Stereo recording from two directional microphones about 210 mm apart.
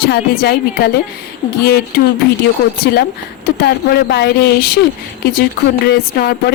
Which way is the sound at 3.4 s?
50° left (ahead or behind).